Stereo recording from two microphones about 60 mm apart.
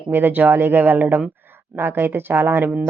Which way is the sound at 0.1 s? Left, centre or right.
Right.